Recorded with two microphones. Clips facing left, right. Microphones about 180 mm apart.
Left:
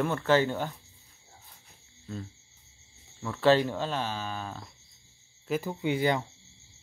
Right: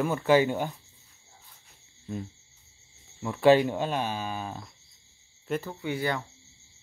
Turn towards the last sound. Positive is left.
turn(degrees=20)  # may be behind; listen again after turning